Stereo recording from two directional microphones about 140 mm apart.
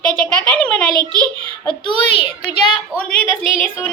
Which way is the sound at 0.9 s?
30° right (ahead or behind).